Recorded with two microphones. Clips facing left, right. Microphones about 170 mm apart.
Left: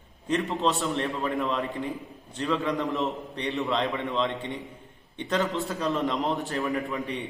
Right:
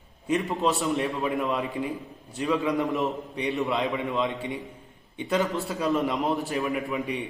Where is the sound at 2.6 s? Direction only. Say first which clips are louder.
Right 2 dB; 15° right (ahead or behind).